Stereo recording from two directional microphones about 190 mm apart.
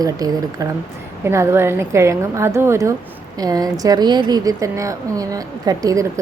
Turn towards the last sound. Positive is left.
turn(degrees=-20)  # may be behind; listen again after turning